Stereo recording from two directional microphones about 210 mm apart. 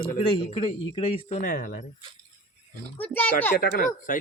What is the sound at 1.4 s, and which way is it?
Speech, 45° left (ahead or behind).